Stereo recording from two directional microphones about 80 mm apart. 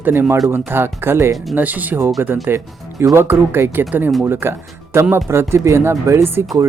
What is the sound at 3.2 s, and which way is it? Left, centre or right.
Speech, right.